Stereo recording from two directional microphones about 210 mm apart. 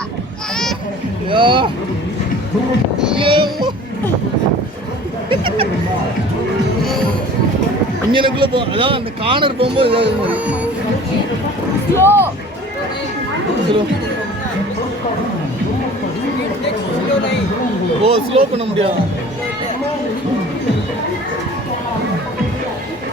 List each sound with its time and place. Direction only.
1.3 s speech: 25° right (ahead or behind)
3.2 s speech: 25° right (ahead or behind)
5.3 s speech: 25° right (ahead or behind)
8.1 s speech: 25° right (ahead or behind)
10.3 s speech: 5° right (ahead or behind)
11.9 s speech: 10° left (ahead or behind)
18.0 s speech: 30° right (ahead or behind)